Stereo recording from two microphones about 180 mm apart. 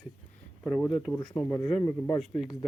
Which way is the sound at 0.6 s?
10° left (ahead or behind).